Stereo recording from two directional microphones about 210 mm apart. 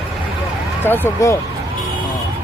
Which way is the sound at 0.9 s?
10° left (ahead or behind).